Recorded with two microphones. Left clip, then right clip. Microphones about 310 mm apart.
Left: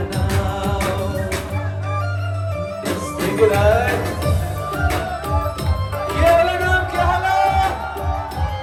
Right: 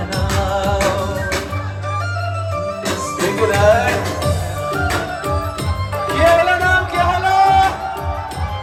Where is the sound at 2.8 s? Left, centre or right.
Right.